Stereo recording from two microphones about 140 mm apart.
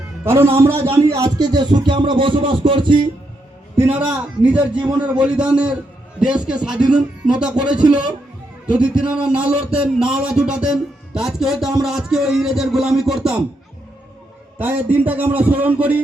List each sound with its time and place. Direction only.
0.3 s a man's voice: 20° right (ahead or behind); by 3.1 s 35° right (ahead or behind)
3.8 s a man's voice: 10° right (ahead or behind)
8.6 s a man's voice: 5° right (ahead or behind)
14.6 s a man's voice: 15° right (ahead or behind)